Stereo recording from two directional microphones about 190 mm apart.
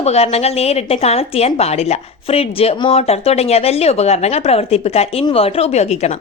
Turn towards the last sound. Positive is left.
turn(degrees=35)  # may be behind; listen again after turning